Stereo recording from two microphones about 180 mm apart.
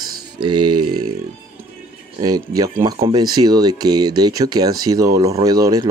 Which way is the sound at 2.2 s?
20° right (ahead or behind).